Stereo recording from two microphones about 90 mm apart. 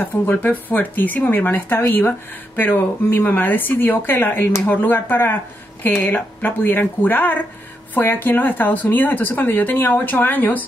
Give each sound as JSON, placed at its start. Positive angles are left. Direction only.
{"t": 0.2, "sound": "speech", "side_deg": 20}